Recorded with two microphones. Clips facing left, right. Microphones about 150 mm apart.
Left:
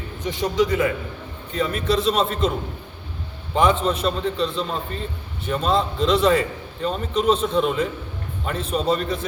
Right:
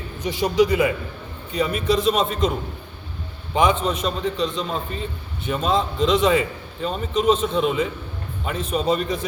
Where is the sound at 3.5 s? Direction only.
Centre (ahead or behind).